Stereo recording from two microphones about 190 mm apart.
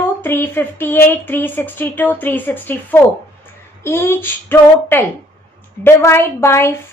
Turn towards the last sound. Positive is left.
turn(degrees=15)  # may be behind; listen again after turning